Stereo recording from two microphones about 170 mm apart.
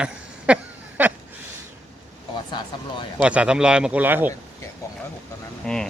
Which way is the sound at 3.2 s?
5° right (ahead or behind).